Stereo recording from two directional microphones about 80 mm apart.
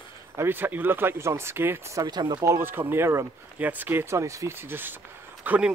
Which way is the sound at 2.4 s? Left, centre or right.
Right.